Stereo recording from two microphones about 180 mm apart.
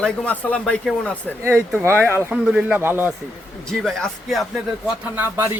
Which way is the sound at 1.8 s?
10° right (ahead or behind).